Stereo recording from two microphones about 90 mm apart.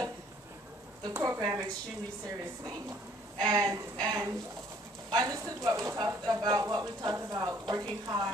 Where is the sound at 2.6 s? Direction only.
45° right (ahead or behind).